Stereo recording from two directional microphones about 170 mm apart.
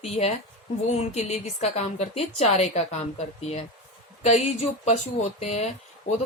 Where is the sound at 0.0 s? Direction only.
40° left (ahead or behind).